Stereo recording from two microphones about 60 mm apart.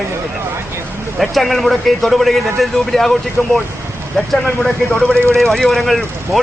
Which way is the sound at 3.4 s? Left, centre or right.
Left.